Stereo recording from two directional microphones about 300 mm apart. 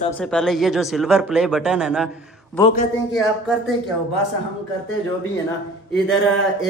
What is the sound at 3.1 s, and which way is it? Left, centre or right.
Speech, centre.